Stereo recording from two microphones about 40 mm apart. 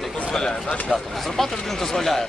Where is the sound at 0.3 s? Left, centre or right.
Centre.